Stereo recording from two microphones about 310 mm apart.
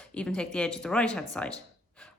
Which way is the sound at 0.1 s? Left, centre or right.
Centre.